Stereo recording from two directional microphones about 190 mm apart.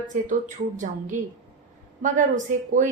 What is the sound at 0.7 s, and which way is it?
A woman's voice, 40° right (ahead or behind).